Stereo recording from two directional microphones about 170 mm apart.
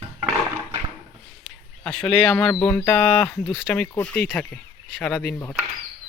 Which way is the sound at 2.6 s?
10° left (ahead or behind).